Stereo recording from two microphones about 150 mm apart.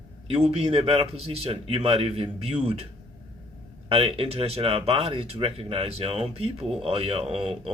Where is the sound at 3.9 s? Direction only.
40° right (ahead or behind).